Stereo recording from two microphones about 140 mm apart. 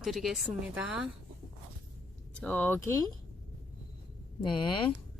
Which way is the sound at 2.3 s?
10° left (ahead or behind).